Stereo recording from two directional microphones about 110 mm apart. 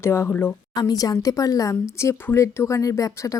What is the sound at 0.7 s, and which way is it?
Speech, 35° left (ahead or behind).